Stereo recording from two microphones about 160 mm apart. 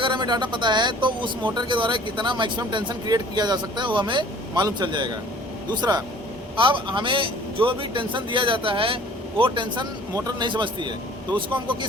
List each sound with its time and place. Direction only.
0.0 s a man's voice: 30° right (ahead or behind)